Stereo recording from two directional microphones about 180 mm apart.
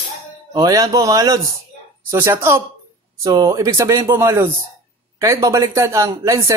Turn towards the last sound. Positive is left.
turn(degrees=-15)  # may be behind; listen again after turning